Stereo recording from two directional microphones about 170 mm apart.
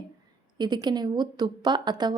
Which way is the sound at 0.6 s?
25° right (ahead or behind).